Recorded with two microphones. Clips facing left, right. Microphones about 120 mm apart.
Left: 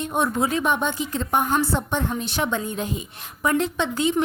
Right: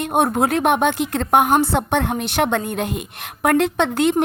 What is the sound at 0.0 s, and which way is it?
A woman's voice, 65° right (ahead or behind).